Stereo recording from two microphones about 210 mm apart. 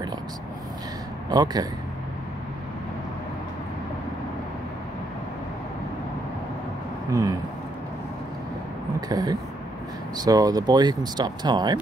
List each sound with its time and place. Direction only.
1.3 s speech: 20° right (ahead or behind)
7.1 s speech: 15° right (ahead or behind)
9.1 s speech: 20° right (ahead or behind)